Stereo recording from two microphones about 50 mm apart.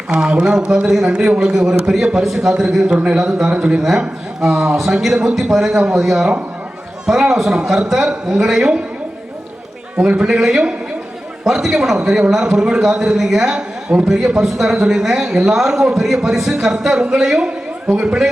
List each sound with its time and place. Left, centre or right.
0.1 s a man's voice: centre
3.5 s speech: centre
3.8 s a man's voice: centre
10.0 s speech: right
10.2 s a man's voice: centre
17.9 s speech: centre